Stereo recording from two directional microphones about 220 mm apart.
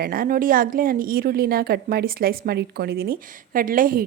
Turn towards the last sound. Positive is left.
turn(degrees=-40)  # may be behind; listen again after turning